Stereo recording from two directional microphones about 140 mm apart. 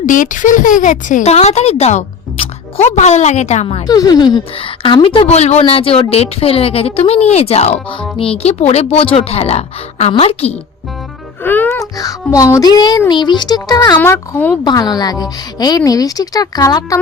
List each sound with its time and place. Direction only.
0.0 s speech: 70° left (ahead or behind); by 3.8 s 50° left (ahead or behind)
3.8 s speech: 25° left (ahead or behind); by 10.6 s 50° left (ahead or behind)
11.4 s music: 15° left (ahead or behind)
11.9 s a child's voice: 25° left (ahead or behind)
14.0 s speech: 15° left (ahead or behind)
14.6 s speech: 30° left (ahead or behind)